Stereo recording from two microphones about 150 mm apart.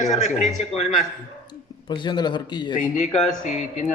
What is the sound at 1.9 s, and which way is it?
Speech, 30° left (ahead or behind).